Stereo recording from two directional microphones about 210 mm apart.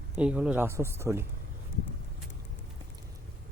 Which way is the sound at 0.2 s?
5° right (ahead or behind).